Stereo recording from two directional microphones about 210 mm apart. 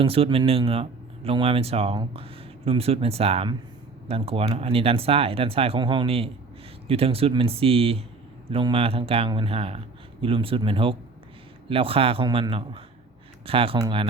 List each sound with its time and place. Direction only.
0.0 s speech: 25° right (ahead or behind)